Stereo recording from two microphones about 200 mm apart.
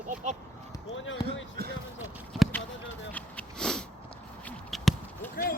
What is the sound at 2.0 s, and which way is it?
Basketball bounce, centre (ahead or behind).